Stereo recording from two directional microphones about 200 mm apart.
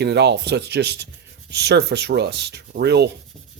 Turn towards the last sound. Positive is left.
turn(degrees=-55)  # may be behind; listen again after turning